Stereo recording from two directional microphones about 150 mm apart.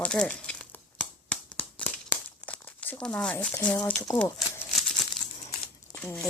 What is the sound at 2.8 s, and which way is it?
Speech, 10° left (ahead or behind).